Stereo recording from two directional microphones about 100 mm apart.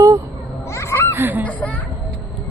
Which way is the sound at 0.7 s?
25° left (ahead or behind).